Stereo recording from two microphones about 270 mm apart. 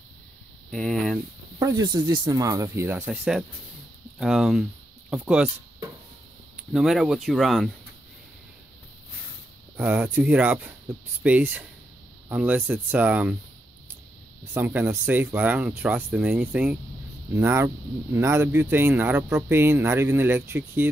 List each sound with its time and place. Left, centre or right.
0.7 s speech: centre
1.6 s speech: centre
9.8 s speech: centre
14.5 s speech: centre